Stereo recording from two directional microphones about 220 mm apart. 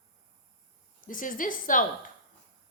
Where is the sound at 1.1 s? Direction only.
35° left (ahead or behind).